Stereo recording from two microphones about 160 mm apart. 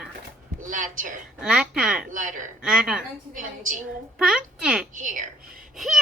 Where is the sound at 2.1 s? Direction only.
55° right (ahead or behind).